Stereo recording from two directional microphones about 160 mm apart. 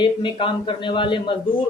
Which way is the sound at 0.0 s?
30° left (ahead or behind).